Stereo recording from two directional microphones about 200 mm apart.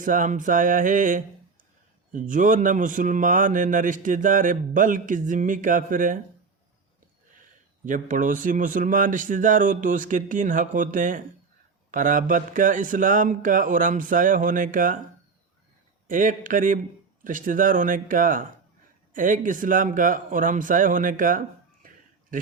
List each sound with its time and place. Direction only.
0.0 s speech: 40° right (ahead or behind)
7.9 s speech: 40° right (ahead or behind)
16.0 s speech: 40° right (ahead or behind)
21.8 s a sound: 45° right (ahead or behind)